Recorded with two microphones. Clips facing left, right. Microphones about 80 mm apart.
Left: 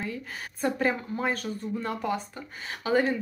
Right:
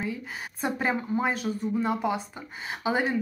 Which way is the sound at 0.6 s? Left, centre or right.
Centre.